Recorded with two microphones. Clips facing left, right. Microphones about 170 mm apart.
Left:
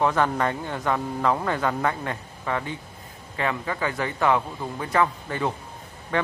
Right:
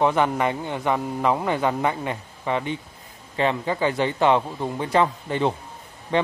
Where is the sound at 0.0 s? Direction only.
15° right (ahead or behind).